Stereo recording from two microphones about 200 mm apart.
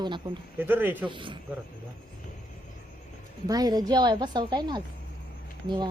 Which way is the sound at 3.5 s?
20° right (ahead or behind).